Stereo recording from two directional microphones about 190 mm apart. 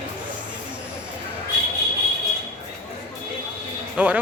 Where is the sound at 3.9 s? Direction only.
5° right (ahead or behind).